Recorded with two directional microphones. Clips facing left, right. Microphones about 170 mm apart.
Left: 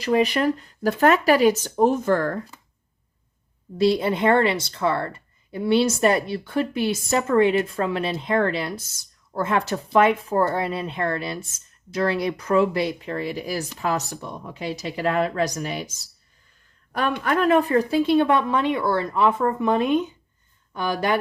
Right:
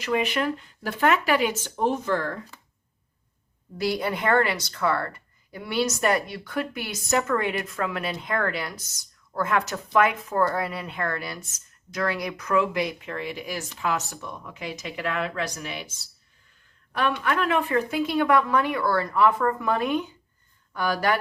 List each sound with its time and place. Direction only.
0.0 s speech: 35° left (ahead or behind)
3.8 s a woman's voice: 25° left (ahead or behind)